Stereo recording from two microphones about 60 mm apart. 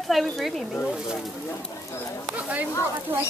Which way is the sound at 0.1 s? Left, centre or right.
Centre.